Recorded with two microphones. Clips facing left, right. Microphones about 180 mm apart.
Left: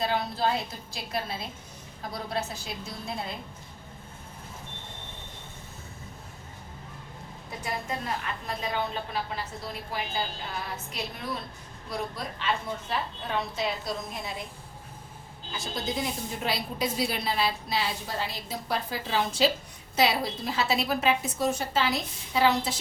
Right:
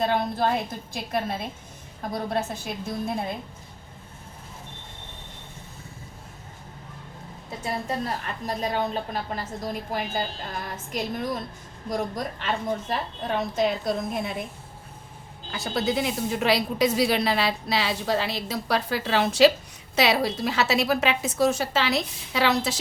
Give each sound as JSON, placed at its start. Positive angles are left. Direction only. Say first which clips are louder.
{"t": 0.0, "sound": "a woman's voice", "louder": "right 4 dB", "side_deg": -50}
{"t": 7.6, "sound": "a woman's voice", "louder": "right 5 dB", "side_deg": -35}
{"t": 15.5, "sound": "a woman's voice", "louder": "right 6 dB", "side_deg": -65}